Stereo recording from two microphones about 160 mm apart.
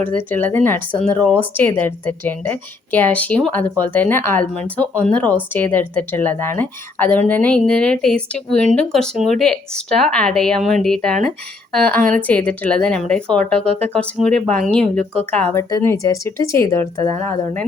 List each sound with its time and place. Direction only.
0.0 s speech: 10° left (ahead or behind)